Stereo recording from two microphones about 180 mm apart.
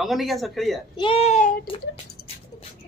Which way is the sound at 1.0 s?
30° left (ahead or behind).